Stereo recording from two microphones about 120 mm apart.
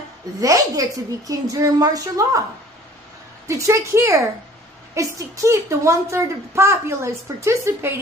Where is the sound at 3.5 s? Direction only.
25° right (ahead or behind).